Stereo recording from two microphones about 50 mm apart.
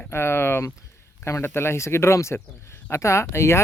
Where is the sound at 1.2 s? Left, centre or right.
Left.